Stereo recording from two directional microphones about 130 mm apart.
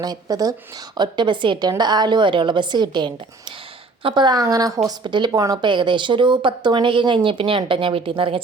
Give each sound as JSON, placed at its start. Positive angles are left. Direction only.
{"t": 0.0, "sound": "speech", "side_deg": -30}